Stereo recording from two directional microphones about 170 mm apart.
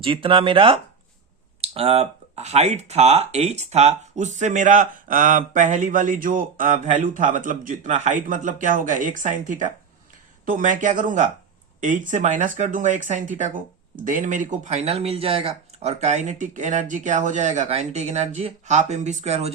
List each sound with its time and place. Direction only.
0.0 s speech: 30° right (ahead or behind)